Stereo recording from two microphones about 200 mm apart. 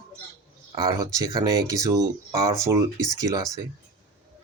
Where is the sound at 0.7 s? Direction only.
15° right (ahead or behind).